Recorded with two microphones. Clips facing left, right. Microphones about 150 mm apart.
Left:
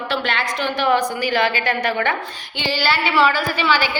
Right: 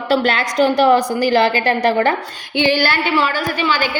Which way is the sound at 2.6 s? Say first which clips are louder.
Right 3 dB; 50° right (ahead or behind).